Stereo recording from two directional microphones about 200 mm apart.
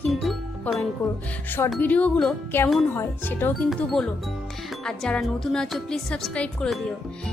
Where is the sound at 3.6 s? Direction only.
Centre (ahead or behind).